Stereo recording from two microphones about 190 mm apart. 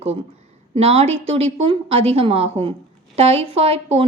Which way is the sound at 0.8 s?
30° right (ahead or behind).